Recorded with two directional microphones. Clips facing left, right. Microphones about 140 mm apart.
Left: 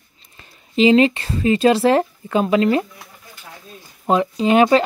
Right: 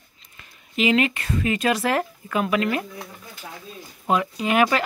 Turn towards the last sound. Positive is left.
turn(degrees=30)  # may be behind; listen again after turning